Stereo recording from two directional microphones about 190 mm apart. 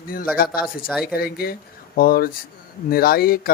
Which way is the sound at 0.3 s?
50° left (ahead or behind).